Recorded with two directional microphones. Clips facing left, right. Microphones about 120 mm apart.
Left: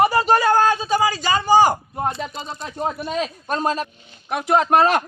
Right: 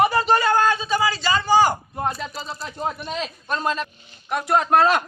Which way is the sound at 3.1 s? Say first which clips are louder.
Left 4 dB; 40° left (ahead or behind).